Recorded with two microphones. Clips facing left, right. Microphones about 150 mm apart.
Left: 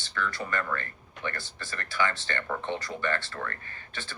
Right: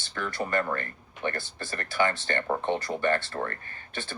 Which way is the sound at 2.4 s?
35° right (ahead or behind).